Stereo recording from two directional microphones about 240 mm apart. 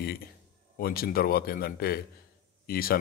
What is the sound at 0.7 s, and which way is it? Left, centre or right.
Speech, left.